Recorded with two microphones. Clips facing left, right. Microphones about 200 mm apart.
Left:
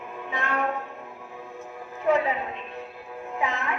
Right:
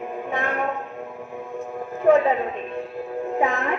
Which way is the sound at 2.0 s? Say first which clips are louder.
Right 6 dB; 50° right (ahead or behind).